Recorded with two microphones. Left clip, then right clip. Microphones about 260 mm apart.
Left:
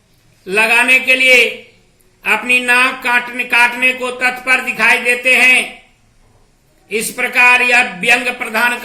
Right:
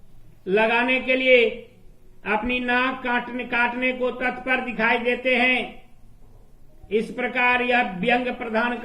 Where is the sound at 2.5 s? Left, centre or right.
Centre.